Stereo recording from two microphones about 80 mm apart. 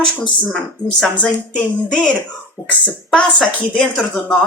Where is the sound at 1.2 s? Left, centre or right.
Centre.